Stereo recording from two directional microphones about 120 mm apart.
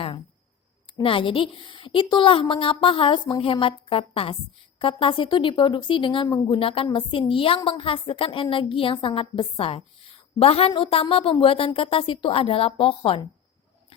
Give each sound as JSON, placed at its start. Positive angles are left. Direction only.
{"t": 1.0, "sound": "a woman's voice", "side_deg": 45}
{"t": 6.6, "sound": "a woman's voice", "side_deg": 50}